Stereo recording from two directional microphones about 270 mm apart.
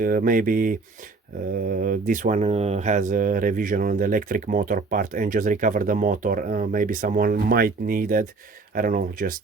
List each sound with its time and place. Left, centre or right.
0.0 s speech: right